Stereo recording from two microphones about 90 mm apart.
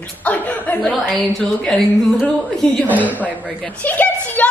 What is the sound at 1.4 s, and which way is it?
A woman's voice, 5° left (ahead or behind).